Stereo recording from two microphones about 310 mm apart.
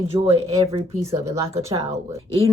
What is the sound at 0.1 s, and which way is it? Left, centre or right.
A woman's voice, centre.